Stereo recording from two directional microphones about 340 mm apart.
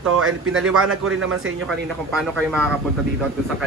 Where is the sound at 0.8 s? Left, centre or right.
Right.